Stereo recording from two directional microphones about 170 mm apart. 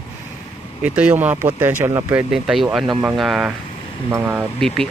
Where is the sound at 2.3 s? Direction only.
5° right (ahead or behind).